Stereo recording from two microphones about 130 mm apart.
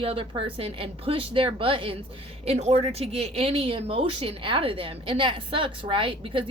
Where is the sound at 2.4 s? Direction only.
55° right (ahead or behind).